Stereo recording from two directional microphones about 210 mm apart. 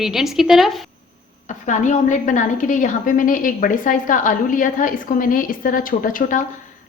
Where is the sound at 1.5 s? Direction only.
35° left (ahead or behind).